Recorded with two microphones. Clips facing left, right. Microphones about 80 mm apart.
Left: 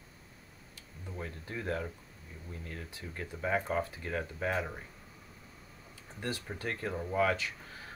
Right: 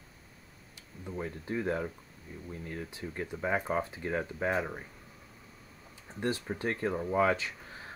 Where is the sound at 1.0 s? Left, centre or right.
Centre.